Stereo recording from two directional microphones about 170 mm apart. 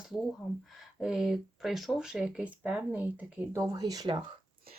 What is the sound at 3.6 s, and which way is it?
Speech, 20° right (ahead or behind).